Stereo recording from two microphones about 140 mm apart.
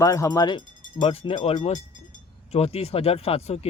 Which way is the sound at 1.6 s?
50° left (ahead or behind).